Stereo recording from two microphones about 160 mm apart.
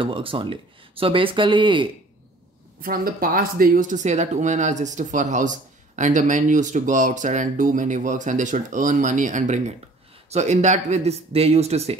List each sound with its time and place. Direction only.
0.0 s speech: 35° right (ahead or behind)
2.8 s speech: 65° right (ahead or behind); by 12.0 s 40° right (ahead or behind)